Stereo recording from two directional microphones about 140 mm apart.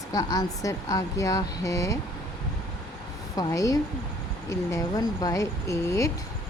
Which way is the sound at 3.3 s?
25° left (ahead or behind).